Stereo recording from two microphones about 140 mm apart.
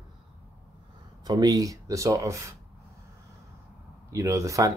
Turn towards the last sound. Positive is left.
turn(degrees=-25)  # may be behind; listen again after turning